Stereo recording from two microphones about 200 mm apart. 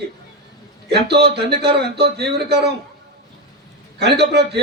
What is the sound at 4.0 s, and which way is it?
Speech, 55° right (ahead or behind).